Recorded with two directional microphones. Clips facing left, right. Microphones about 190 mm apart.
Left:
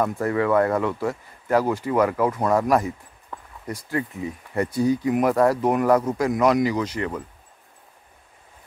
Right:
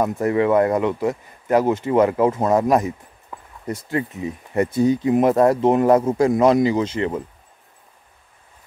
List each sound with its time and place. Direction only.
0.0 s speech: 20° right (ahead or behind)
3.3 s a sound: 10° right (ahead or behind)
3.6 s speech: 25° right (ahead or behind)